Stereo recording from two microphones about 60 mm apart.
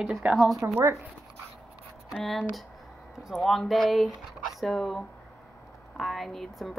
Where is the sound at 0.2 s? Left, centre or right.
Centre.